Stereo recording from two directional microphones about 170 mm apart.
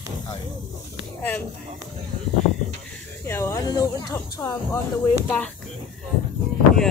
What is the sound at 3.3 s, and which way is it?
Speech, 15° left (ahead or behind).